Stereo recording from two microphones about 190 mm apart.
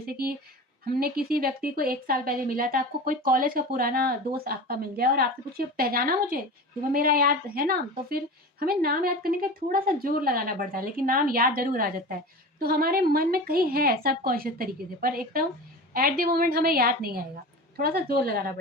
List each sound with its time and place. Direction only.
0.0 s speech: 50° right (ahead or behind)